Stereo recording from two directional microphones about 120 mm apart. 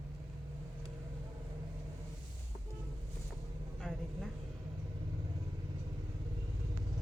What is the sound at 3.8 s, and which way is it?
Speech, centre (ahead or behind).